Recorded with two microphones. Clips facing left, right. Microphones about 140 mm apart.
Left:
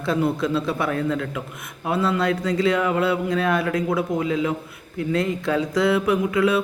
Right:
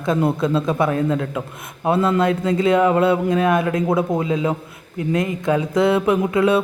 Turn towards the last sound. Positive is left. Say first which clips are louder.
# right 3 dB
turn(degrees=-25)  # may be behind; listen again after turning